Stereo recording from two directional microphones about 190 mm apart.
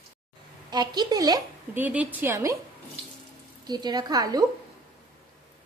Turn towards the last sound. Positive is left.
turn(degrees=-20)  # may be behind; listen again after turning